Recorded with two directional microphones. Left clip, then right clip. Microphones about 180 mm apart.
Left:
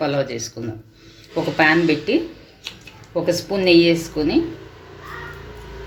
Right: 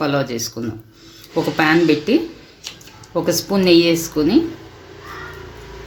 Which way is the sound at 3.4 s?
85° right.